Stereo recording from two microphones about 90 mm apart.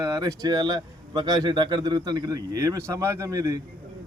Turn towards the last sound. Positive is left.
turn(degrees=-40)  # may be behind; listen again after turning